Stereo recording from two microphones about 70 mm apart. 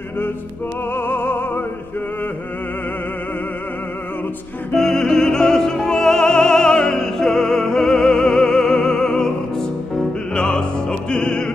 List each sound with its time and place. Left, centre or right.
0.9 s opera: left
4.7 s music: centre